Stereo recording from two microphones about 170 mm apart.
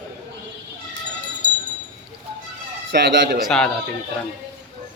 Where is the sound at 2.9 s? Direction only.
70° right (ahead or behind).